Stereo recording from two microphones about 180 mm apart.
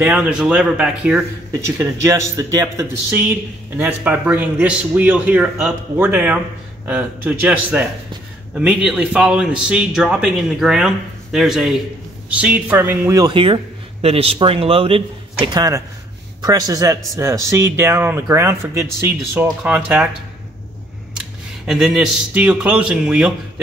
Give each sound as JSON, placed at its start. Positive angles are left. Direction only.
{"t": 0.0, "sound": "a man's voice", "side_deg": -5}
{"t": 1.5, "sound": "a man's voice", "side_deg": -15}
{"t": 21.6, "sound": "a man's voice", "side_deg": 0}